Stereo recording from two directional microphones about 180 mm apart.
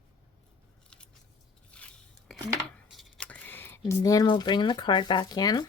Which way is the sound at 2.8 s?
Centre (ahead or behind).